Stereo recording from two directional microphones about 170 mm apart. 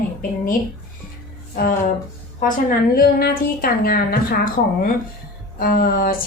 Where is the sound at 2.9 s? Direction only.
60° left (ahead or behind).